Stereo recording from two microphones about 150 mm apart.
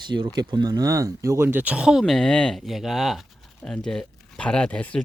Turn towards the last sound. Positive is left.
turn(degrees=5)  # may be behind; listen again after turning